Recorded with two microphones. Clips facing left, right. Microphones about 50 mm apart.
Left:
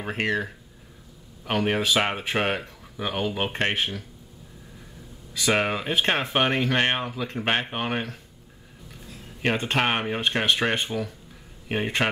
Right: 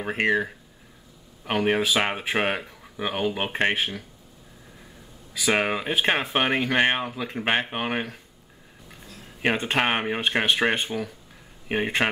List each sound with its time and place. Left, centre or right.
0.0 s speech: centre
5.3 s speech: centre
9.4 s speech: centre